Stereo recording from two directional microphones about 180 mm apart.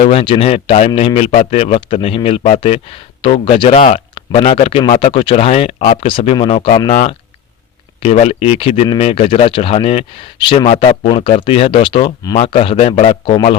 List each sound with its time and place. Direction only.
0.0 s speech: 35° left (ahead or behind)
8.0 s speech: 35° left (ahead or behind)